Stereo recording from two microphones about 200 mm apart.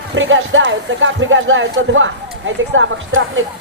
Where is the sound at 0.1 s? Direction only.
70° right (ahead or behind).